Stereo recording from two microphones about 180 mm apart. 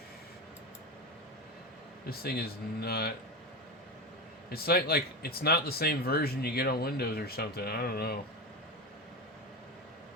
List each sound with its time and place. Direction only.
2.0 s speech: 60° left (ahead or behind)
4.4 s speech: 60° left (ahead or behind)